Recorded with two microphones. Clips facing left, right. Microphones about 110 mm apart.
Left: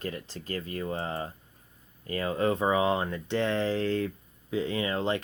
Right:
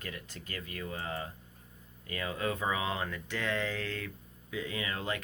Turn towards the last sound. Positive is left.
turn(degrees=30)  # may be behind; listen again after turning